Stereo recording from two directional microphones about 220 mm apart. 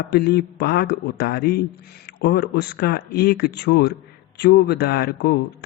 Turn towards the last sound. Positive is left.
turn(degrees=45)  # may be behind; listen again after turning